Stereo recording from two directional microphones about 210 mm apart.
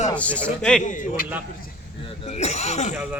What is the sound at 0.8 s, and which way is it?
Speech, 40° left (ahead or behind).